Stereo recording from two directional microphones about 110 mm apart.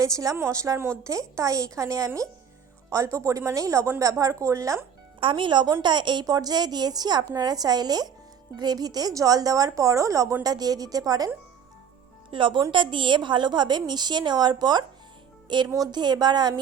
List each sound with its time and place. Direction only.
0.0 s a woman's voice: 30° right (ahead or behind)
5.2 s a woman's voice: 50° right (ahead or behind)
12.3 s a woman's voice: 50° right (ahead or behind)